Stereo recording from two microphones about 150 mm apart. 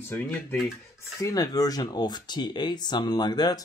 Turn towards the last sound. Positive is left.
turn(degrees=25)  # may be behind; listen again after turning